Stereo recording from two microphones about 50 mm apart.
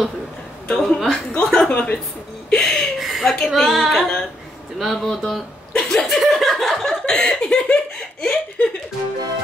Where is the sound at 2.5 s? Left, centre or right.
Centre.